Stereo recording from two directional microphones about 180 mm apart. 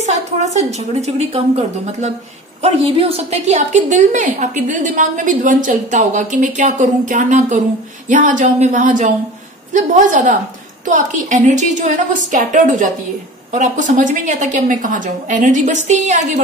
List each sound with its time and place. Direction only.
0.0 s a woman's voice: 40° right (ahead or behind)